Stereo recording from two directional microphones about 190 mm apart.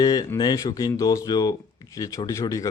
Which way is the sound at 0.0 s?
20° left (ahead or behind).